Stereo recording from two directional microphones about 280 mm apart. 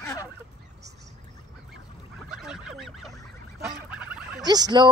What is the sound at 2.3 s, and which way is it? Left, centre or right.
Goose, centre.